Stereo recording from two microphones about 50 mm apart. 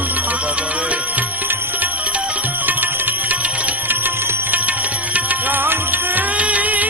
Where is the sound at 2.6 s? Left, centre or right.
Right.